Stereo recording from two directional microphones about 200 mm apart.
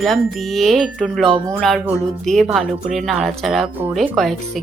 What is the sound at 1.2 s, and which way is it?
Speech, 25° right (ahead or behind).